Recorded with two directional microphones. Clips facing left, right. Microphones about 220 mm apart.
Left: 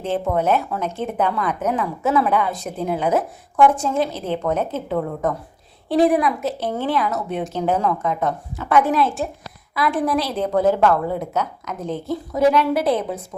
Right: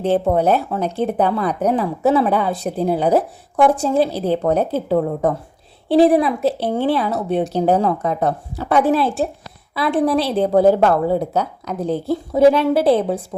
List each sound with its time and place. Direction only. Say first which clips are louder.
0.0 s speech: right 5 dB; 35° right (ahead or behind)